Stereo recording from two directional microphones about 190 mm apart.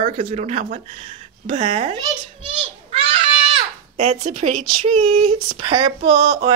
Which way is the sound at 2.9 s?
30° right (ahead or behind).